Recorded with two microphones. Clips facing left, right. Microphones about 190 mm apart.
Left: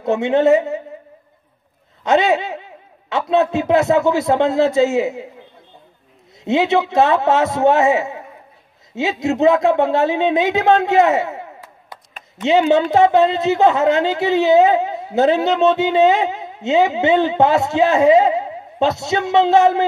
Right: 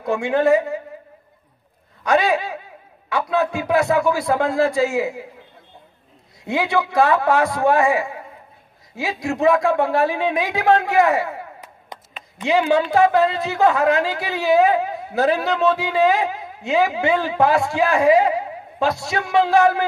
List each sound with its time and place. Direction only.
0.0 s a woman's voice: 25° left (ahead or behind)
2.0 s a woman's voice: 25° left (ahead or behind)
6.4 s a woman's voice: 25° left (ahead or behind)
11.9 s a sound: 20° right (ahead or behind)
12.4 s a woman's voice: 25° left (ahead or behind)